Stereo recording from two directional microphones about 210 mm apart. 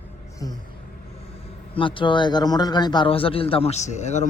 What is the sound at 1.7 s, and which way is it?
A man's voice, 25° left (ahead or behind).